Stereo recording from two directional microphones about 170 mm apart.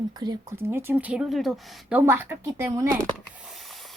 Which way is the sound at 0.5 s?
15° right (ahead or behind).